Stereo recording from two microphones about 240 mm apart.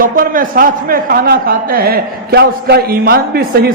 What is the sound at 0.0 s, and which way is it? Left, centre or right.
A man's voice, right.